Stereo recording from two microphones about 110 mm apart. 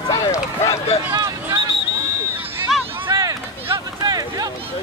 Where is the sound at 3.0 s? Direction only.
45° right (ahead or behind).